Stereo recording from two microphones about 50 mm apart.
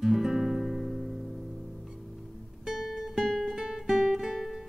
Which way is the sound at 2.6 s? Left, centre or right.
Centre.